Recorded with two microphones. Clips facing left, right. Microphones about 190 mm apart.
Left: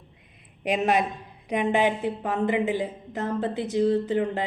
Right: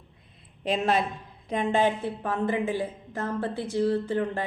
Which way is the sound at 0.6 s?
15° left (ahead or behind).